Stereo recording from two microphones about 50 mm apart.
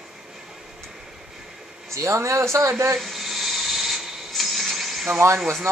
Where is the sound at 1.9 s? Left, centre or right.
Right.